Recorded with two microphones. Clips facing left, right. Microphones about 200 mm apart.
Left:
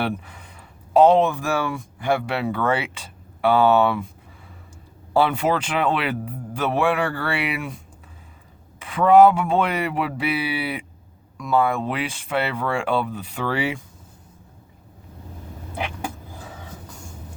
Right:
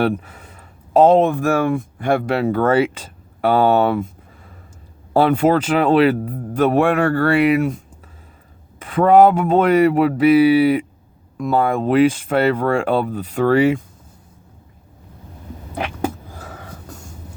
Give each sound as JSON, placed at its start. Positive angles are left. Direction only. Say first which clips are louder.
{"t": 0.0, "sound": "speech", "louder": "right 7 dB", "side_deg": -45}
{"t": 5.1, "sound": "speech", "louder": "right 6 dB", "side_deg": -45}
{"t": 8.8, "sound": "speech", "louder": "right 2 dB", "side_deg": -45}